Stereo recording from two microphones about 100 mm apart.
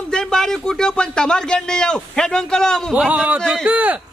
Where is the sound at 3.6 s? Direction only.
15° right (ahead or behind).